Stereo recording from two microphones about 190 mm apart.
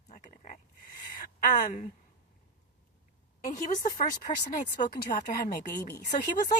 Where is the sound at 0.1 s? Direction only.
45° left (ahead or behind).